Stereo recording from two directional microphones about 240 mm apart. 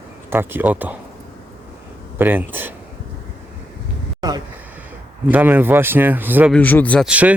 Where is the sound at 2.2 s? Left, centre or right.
Centre.